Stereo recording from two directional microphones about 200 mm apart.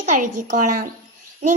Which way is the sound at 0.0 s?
40° right (ahead or behind).